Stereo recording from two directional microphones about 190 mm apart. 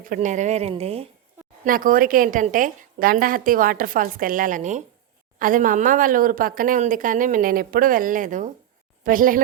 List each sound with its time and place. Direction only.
0.0 s speech: 45° right (ahead or behind)
1.6 s speech: 45° right (ahead or behind)